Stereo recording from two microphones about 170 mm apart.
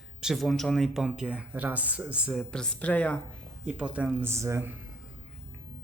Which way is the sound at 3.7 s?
5° right (ahead or behind).